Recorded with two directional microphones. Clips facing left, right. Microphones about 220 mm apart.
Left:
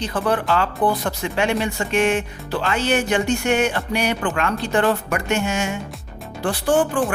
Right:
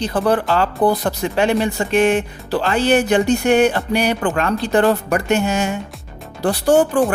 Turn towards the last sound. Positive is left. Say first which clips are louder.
# right 4 dB
turn(degrees=-40)  # may be behind; listen again after turning